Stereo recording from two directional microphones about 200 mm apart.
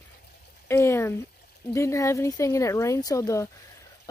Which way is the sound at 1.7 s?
15° left (ahead or behind).